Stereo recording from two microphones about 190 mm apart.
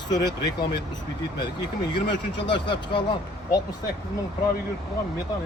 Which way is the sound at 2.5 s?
25° left (ahead or behind).